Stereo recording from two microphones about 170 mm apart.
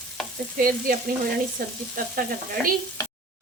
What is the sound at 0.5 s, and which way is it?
Frying, 55° right (ahead or behind).